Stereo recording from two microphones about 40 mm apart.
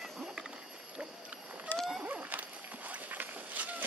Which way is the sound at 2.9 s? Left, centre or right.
Right.